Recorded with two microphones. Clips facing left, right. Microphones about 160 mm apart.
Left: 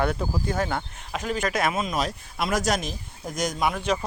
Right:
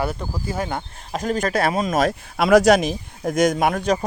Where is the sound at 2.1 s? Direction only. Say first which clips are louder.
Right 11 dB; 70° right (ahead or behind); by 3.9 s 45° right (ahead or behind).